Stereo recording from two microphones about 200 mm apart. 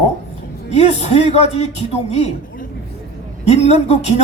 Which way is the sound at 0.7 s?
30° left (ahead or behind).